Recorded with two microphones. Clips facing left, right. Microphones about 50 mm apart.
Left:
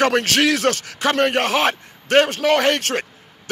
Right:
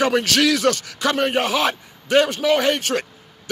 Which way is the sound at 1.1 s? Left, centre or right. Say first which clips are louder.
Left 2 dB; left.